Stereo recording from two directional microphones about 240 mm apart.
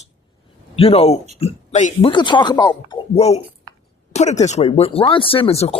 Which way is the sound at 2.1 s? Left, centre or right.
Centre.